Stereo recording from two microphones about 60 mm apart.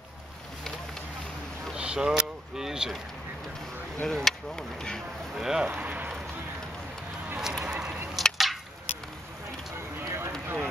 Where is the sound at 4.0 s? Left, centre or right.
Centre.